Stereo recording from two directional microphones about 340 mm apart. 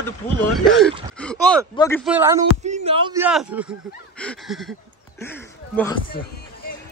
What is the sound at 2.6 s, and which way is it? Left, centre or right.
A man's voice, centre.